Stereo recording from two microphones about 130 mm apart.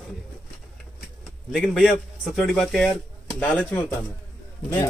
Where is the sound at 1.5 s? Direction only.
Centre (ahead or behind).